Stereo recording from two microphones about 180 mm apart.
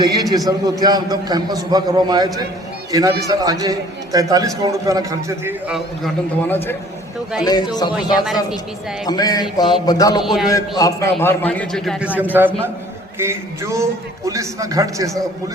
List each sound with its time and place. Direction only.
0.0 s a man's voice: 20° right (ahead or behind)
5.6 s a man's voice: centre (ahead or behind)
7.4 s a sound: 20° left (ahead or behind)
8.2 s a man's voice: centre (ahead or behind)
9.0 s a sound: 20° left (ahead or behind)
10.2 s a man's voice: centre (ahead or behind)
10.4 s a man's voice: 20° left (ahead or behind); by 12.0 s 5° left (ahead or behind)
12.4 s a man's voice: 10° right (ahead or behind)